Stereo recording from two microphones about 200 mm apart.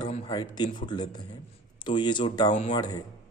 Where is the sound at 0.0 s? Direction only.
25° left (ahead or behind).